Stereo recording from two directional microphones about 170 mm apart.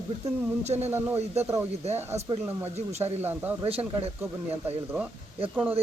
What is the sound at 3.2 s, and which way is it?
Speech, 10° right (ahead or behind).